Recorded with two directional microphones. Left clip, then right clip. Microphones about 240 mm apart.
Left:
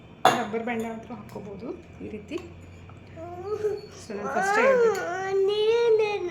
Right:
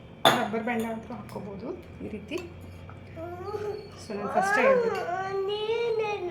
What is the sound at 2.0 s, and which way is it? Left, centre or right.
Speech, centre.